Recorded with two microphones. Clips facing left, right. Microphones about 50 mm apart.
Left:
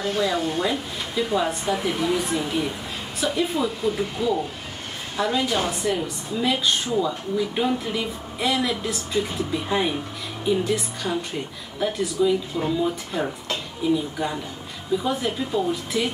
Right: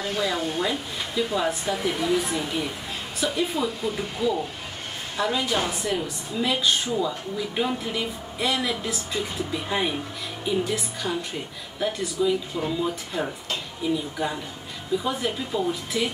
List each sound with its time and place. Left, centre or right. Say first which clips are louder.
0.1 s a woman's voice: left 3 dB; centre